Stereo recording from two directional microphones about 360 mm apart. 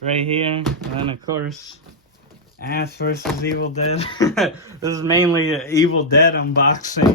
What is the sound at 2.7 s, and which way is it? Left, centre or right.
Speech, left.